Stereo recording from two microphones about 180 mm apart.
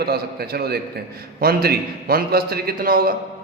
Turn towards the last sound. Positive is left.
turn(degrees=-55)  # may be behind; listen again after turning